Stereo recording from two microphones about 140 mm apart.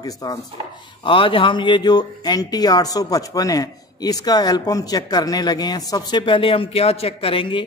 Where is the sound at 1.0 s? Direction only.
40° left (ahead or behind).